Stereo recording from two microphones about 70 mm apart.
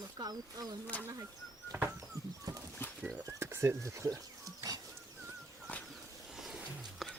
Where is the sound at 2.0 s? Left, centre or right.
Right.